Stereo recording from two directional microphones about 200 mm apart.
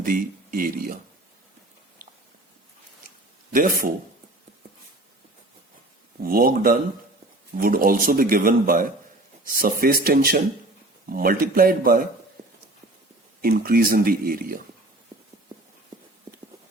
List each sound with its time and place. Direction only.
0.0 s speech: 45° right (ahead or behind)
3.5 s speech: 45° right (ahead or behind)
6.2 s speech: 45° right (ahead or behind)
13.4 s speech: 50° right (ahead or behind)